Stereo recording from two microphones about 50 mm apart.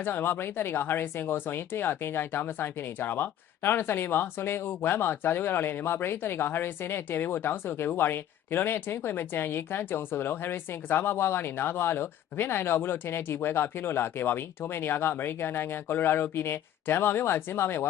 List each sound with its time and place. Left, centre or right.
0.0 s speech: left